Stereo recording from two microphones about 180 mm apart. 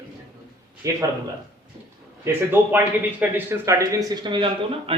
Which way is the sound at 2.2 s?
10° right (ahead or behind).